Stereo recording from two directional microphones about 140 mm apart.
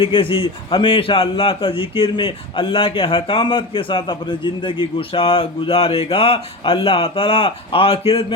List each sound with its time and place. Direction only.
0.0 s a man's voice: 40° left (ahead or behind)